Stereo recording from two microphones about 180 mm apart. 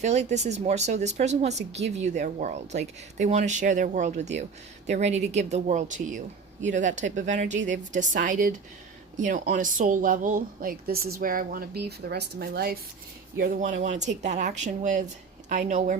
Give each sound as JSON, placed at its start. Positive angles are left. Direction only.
{"t": 0.0, "sound": "speech", "side_deg": -40}